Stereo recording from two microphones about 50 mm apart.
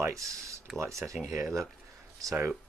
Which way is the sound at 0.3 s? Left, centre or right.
Right.